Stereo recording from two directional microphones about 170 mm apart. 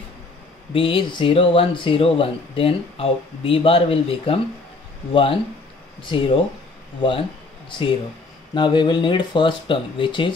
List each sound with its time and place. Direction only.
0.7 s speech: 30° left (ahead or behind)
8.5 s speech: 25° left (ahead or behind)